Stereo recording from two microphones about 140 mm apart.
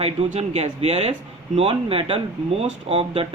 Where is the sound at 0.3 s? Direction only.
50° right (ahead or behind).